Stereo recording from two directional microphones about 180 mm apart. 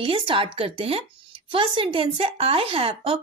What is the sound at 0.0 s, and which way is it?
Speech, 30° right (ahead or behind).